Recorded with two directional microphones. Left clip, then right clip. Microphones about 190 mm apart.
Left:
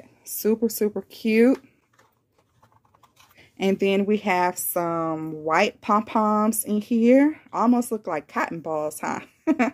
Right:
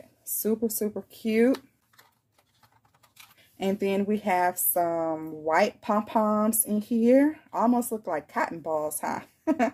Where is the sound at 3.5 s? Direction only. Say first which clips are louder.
Left 5 dB; 45° left (ahead or behind).